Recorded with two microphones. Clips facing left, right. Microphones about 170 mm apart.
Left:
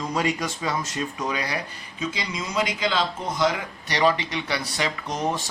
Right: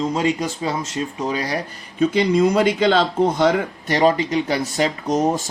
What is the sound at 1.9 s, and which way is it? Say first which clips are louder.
Speech: right 14 dB; 55° right (ahead or behind).